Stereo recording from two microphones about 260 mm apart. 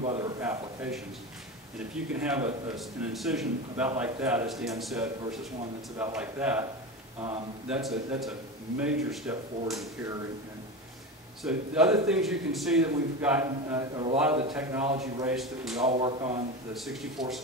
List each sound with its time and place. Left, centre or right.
0.0 s a man's voice: right
0.4 s a man's voice: centre
2.1 s a man's voice: centre
7.6 s a man's voice: centre
11.4 s a man's voice: centre
15.8 s speech: right
16.7 s a man's voice: centre